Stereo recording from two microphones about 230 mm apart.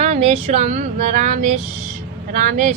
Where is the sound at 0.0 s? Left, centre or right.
Right.